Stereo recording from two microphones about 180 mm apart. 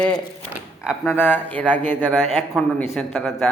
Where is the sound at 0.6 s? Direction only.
5° right (ahead or behind).